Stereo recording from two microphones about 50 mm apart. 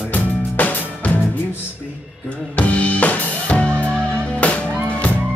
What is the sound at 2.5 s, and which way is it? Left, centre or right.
Drum kit, left.